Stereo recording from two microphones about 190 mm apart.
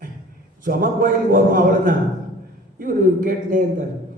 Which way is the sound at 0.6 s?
45° right (ahead or behind).